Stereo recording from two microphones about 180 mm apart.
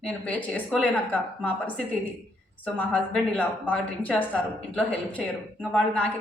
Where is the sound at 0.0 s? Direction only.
5° left (ahead or behind).